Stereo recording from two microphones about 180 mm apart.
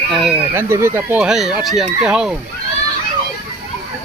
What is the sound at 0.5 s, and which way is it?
Speech, 15° right (ahead or behind).